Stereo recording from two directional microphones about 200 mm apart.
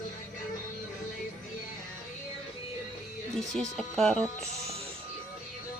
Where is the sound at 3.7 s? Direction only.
5° left (ahead or behind).